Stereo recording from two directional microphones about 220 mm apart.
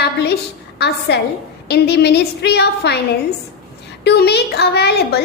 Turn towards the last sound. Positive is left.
turn(degrees=50)  # may be behind; listen again after turning